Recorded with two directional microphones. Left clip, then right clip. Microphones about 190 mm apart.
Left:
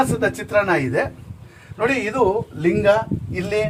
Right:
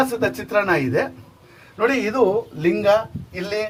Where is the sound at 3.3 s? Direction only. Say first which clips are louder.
Left 3 dB; 20° left (ahead or behind).